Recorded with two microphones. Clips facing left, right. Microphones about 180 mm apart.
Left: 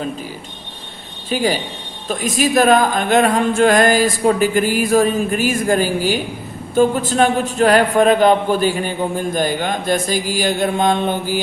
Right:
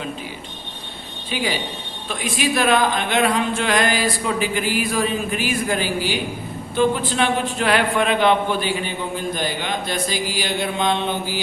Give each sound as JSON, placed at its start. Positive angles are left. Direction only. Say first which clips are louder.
{"t": 1.3, "sound": "a woman's voice", "louder": "left 6 dB", "side_deg": 45}